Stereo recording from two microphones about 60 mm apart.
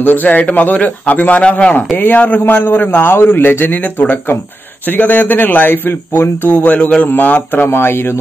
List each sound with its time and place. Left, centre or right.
0.0 s a man's voice: left
6.5 s a man's voice: left
7.6 s a man's voice: left